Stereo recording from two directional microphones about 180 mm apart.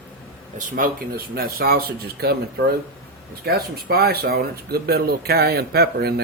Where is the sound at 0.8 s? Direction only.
55° right (ahead or behind).